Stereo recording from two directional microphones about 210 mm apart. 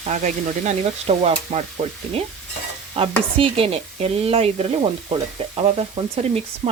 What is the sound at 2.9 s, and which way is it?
Speech, 25° right (ahead or behind).